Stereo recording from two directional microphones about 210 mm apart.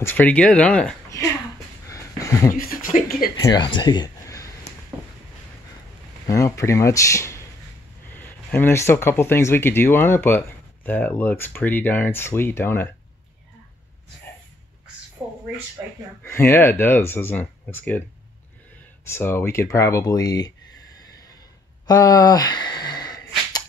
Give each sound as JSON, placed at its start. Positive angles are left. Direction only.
{"t": 0.0, "sound": "speech", "side_deg": 10}
{"t": 1.9, "sound": "a sound", "side_deg": 15}
{"t": 2.5, "sound": "speech", "side_deg": 40}
{"t": 3.3, "sound": "speech", "side_deg": 20}
{"t": 6.2, "sound": "speech", "side_deg": 15}
{"t": 16.2, "sound": "speech", "side_deg": 10}
{"t": 19.0, "sound": "speech", "side_deg": 10}
{"t": 21.8, "sound": "sigh", "side_deg": 20}